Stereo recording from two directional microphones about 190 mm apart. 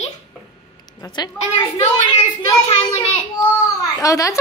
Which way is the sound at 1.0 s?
25° left (ahead or behind).